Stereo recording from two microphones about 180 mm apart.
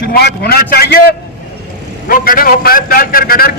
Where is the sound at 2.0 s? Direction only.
50° left (ahead or behind).